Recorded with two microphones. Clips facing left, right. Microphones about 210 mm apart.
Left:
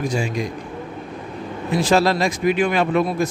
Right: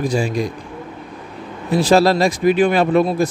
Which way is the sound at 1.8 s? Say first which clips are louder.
Right 4 dB; 35° right (ahead or behind).